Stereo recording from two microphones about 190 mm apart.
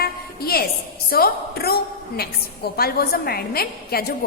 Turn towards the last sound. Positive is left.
turn(degrees=55)  # may be behind; listen again after turning